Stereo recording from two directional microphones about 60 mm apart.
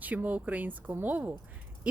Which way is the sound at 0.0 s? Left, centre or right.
Right.